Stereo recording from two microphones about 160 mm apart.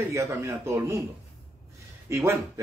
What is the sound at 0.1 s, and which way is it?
Speech, 15° right (ahead or behind).